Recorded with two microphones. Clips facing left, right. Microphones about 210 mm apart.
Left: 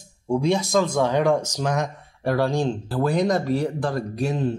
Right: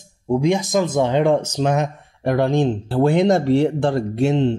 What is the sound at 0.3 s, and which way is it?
Speech, 15° right (ahead or behind).